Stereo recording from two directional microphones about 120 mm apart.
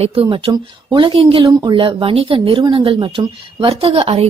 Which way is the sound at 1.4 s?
30° right (ahead or behind).